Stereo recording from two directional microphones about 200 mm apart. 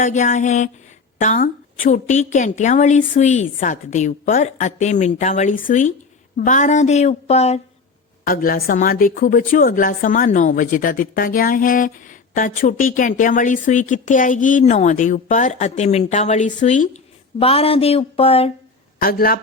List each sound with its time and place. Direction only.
0.0 s a woman's voice: 40° left (ahead or behind)
8.2 s a woman's voice: 45° left (ahead or behind)
17.4 s a sound: 30° left (ahead or behind)
18.9 s a man's voice: 45° left (ahead or behind)